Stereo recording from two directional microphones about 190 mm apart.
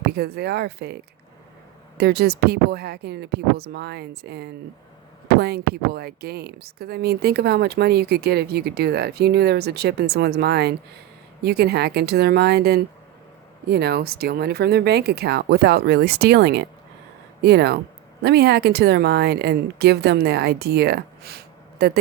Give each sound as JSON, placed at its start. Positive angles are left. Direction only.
{"t": 0.0, "sound": "speech", "side_deg": -55}
{"t": 2.0, "sound": "speech", "side_deg": -60}